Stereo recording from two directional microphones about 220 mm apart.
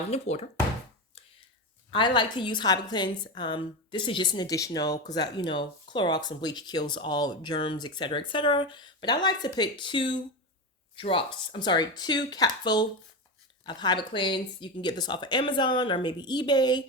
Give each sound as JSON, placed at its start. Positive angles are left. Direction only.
{"t": 0.1, "sound": "a woman's voice", "side_deg": 30}
{"t": 1.9, "sound": "a woman's voice", "side_deg": 20}